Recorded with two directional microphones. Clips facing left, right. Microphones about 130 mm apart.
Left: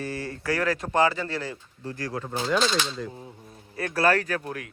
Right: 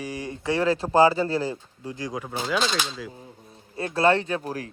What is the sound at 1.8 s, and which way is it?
Speech, 15° right (ahead or behind).